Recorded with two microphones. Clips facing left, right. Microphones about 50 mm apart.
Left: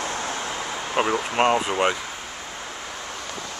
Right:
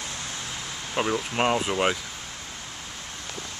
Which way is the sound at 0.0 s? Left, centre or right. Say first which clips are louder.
Left 8 dB; left.